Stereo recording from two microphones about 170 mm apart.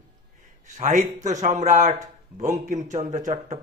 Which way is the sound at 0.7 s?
45° right (ahead or behind).